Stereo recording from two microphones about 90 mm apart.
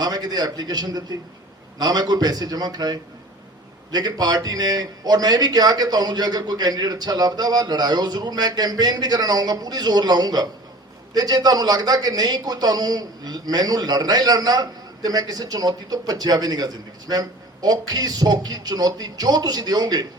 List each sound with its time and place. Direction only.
0.0 s a man's voice: 45° right (ahead or behind)